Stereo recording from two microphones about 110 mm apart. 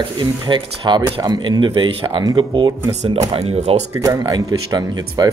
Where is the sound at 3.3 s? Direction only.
70° right (ahead or behind).